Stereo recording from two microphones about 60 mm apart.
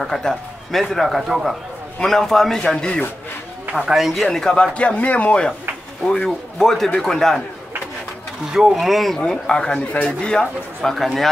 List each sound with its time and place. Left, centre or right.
0.0 s a man's voice: centre
3.7 s a man's voice: centre
4.2 s a man's voice: centre
8.5 s a man's voice: centre
9.2 s speech: centre
10.8 s a man's voice: centre